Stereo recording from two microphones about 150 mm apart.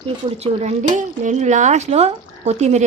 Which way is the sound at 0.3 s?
45° right (ahead or behind).